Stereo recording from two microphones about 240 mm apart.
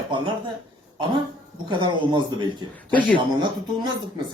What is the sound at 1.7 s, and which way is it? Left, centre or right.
A man's voice, centre.